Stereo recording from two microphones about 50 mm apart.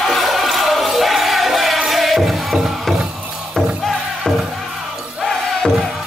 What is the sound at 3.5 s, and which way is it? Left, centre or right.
Music, centre.